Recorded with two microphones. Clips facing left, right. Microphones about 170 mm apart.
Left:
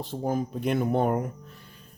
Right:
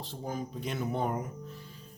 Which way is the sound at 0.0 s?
50° left (ahead or behind).